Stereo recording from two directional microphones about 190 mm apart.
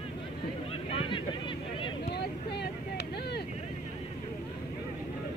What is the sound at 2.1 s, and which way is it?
Vehicle, 60° left (ahead or behind).